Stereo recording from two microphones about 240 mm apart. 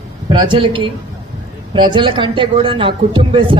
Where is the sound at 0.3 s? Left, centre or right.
Centre.